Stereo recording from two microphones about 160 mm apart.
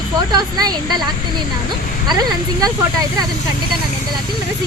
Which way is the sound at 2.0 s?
25° right (ahead or behind).